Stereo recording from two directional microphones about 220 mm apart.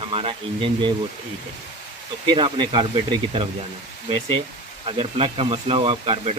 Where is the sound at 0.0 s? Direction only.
25° right (ahead or behind).